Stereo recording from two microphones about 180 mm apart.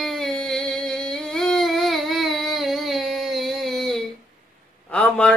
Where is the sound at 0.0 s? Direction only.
Centre (ahead or behind).